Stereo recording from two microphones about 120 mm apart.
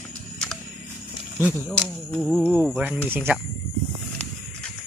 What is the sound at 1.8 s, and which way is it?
Speech, 10° left (ahead or behind).